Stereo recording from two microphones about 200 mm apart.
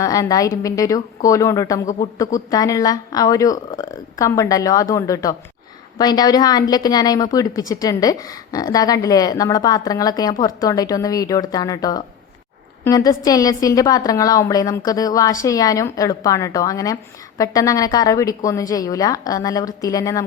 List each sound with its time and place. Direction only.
0.0 s a woman's voice: 15° left (ahead or behind)